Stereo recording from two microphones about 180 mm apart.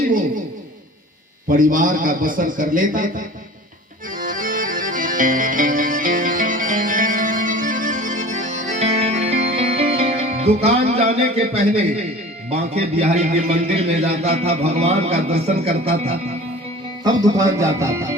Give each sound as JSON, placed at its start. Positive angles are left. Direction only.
{"t": 0.1, "sound": "speech", "side_deg": -50}
{"t": 1.5, "sound": "a man's voice", "side_deg": -50}
{"t": 4.2, "sound": "music", "side_deg": -50}
{"t": 12.5, "sound": "a man's voice", "side_deg": -35}
{"t": 17.0, "sound": "speech", "side_deg": -20}